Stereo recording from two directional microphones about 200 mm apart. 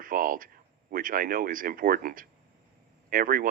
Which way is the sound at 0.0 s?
45° right (ahead or behind).